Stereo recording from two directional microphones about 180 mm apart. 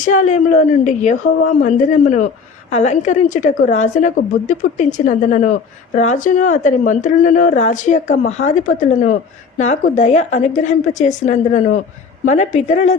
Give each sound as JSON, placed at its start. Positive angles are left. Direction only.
{"t": 0.0, "sound": "a woman's voice", "side_deg": 40}